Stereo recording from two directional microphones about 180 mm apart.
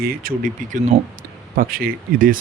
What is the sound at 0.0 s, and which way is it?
Speech, 55° right (ahead or behind).